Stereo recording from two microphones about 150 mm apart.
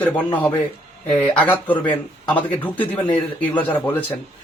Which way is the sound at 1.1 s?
10° left (ahead or behind).